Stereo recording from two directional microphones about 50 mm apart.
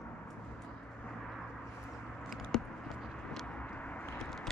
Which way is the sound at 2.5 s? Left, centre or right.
Centre.